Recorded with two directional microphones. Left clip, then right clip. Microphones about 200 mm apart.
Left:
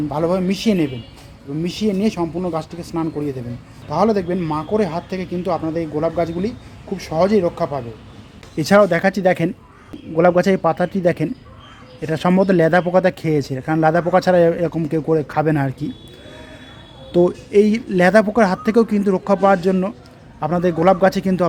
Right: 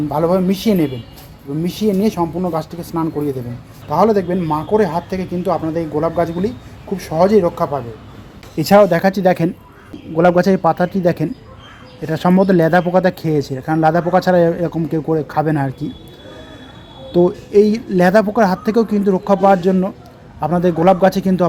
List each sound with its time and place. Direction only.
0.1 s a man's voice: centre (ahead or behind); by 15.9 s 20° left (ahead or behind)
17.1 s speech: 15° left (ahead or behind)